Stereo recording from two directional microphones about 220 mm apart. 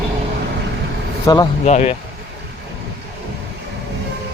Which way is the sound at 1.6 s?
30° left (ahead or behind).